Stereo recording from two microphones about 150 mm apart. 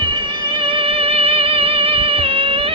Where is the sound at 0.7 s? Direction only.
40° right (ahead or behind).